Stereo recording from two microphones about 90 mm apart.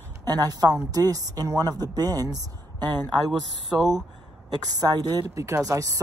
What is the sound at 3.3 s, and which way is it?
Speech, centre (ahead or behind).